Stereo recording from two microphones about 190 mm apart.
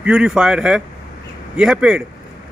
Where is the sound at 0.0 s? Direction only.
5° right (ahead or behind).